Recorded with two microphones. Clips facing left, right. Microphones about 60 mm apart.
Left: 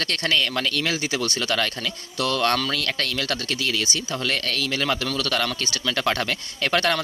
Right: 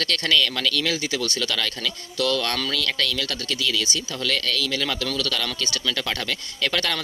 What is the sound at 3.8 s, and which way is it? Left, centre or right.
Speech, left.